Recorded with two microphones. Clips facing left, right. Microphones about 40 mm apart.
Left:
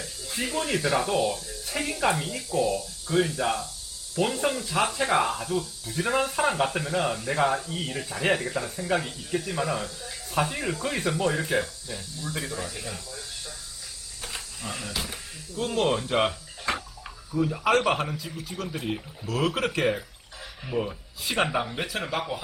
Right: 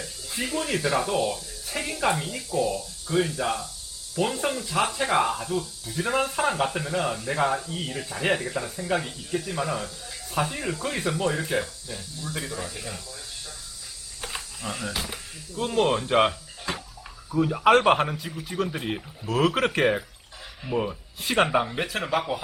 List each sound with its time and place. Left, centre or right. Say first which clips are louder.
0.0 s speech: even; centre
14.2 s a sound: right 2 dB; centre
15.0 s speech: right 1 dB; centre
17.3 s speech: right 4 dB; centre